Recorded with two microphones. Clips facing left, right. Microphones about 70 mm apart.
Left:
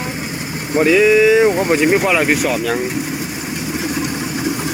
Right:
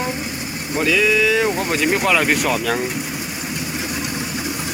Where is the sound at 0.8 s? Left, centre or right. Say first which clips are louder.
Left 6 dB; left; by 2.8 s centre.